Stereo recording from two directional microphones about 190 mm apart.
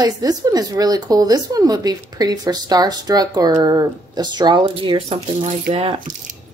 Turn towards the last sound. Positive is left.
turn(degrees=-30)  # may be behind; listen again after turning